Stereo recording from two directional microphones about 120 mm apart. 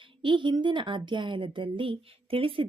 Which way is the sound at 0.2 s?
40° right (ahead or behind).